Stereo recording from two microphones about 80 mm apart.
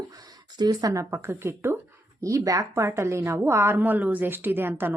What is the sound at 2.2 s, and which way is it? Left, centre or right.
A woman's voice, right.